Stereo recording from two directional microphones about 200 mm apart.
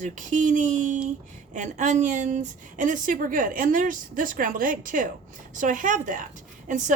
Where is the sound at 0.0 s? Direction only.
40° right (ahead or behind).